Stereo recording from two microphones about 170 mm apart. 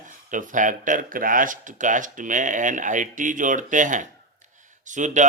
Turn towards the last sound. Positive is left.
turn(degrees=-45)  # may be behind; listen again after turning